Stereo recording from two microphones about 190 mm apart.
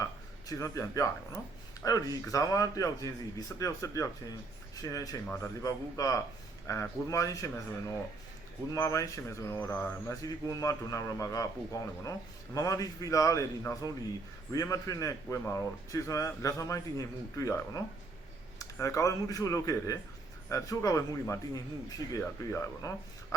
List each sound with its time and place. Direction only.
0.0 s speech: 15° left (ahead or behind)